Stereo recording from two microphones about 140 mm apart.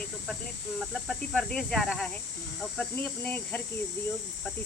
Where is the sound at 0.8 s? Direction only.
Centre (ahead or behind).